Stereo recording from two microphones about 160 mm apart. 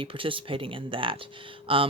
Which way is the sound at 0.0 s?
35° right (ahead or behind).